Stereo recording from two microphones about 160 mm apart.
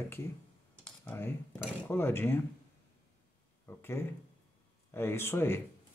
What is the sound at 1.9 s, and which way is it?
Speech, 15° left (ahead or behind).